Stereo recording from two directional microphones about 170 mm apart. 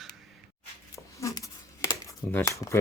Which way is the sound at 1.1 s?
20° left (ahead or behind).